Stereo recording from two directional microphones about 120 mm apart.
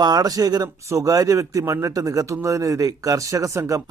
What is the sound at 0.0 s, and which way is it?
A man's voice, 35° right (ahead or behind).